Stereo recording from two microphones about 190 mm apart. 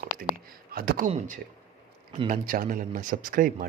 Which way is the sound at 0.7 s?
50° right (ahead or behind).